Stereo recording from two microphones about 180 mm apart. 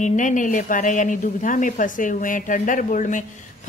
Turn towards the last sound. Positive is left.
turn(degrees=45)  # may be behind; listen again after turning